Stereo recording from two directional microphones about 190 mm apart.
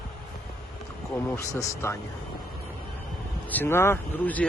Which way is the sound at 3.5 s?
10° left (ahead or behind).